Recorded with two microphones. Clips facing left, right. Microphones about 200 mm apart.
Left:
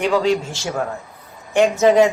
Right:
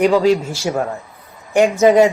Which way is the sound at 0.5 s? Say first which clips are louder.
Right 5 dB; 15° right (ahead or behind).